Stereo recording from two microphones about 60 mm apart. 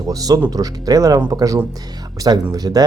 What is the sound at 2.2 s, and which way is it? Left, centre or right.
Speech, right.